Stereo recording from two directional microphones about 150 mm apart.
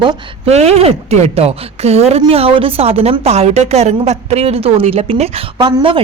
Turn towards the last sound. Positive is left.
turn(degrees=-35)  # may be behind; listen again after turning